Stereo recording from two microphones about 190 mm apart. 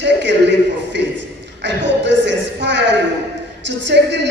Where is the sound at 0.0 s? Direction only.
65° right (ahead or behind).